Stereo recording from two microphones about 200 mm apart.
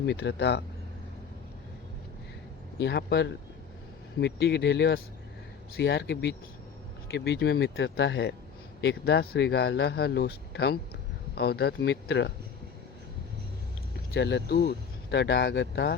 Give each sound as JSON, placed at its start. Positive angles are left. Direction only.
{"t": 0.0, "sound": "speech", "side_deg": 60}
{"t": 2.7, "sound": "speech", "side_deg": 60}
{"t": 14.1, "sound": "speech", "side_deg": 60}